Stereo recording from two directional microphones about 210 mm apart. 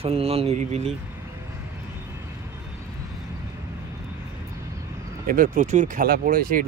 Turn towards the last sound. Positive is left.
turn(degrees=-45)  # may be behind; listen again after turning